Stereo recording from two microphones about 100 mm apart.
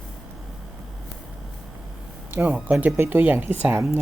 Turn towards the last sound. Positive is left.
turn(degrees=-20)  # may be behind; listen again after turning